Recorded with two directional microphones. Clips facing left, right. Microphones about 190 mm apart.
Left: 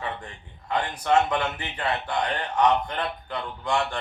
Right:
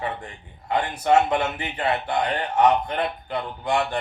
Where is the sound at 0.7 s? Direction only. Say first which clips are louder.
Right 3 dB; 25° right (ahead or behind).